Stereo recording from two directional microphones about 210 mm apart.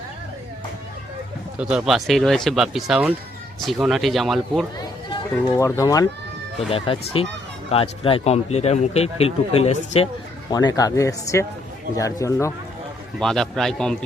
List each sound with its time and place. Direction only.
1.5 s speech: 5° right (ahead or behind)
5.5 s a man's voice: 15° left (ahead or behind)
10.5 s speech: 20° left (ahead or behind)
13.1 s speech: centre (ahead or behind)